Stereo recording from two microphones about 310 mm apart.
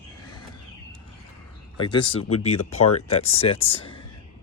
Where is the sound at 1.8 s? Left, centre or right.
Centre.